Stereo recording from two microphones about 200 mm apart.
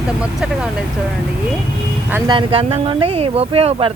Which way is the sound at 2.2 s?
25° right (ahead or behind).